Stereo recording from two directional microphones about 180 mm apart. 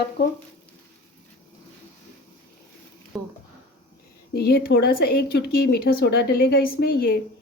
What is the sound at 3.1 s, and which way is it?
Speech, 5° left (ahead or behind).